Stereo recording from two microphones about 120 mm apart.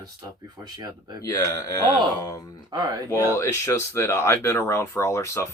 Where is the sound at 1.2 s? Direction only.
30° left (ahead or behind).